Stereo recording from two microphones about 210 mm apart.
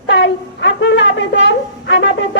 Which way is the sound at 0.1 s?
60° left (ahead or behind).